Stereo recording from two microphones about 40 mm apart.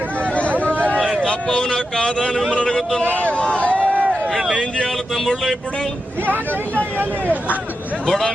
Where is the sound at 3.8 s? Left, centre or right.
Right.